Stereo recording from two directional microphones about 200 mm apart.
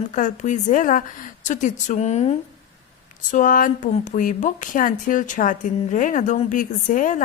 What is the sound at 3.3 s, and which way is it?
A woman's voice, 40° left (ahead or behind).